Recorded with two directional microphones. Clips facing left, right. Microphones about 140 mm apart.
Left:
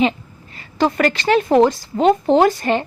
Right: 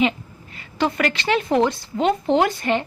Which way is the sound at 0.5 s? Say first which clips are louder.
Left 4 dB; 40° left (ahead or behind).